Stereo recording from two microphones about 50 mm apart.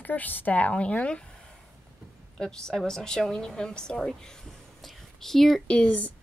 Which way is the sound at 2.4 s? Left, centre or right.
Centre.